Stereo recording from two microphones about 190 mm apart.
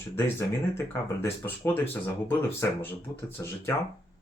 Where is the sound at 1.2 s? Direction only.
10° left (ahead or behind).